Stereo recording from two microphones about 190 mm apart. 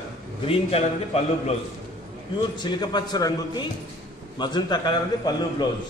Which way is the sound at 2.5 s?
25° left (ahead or behind).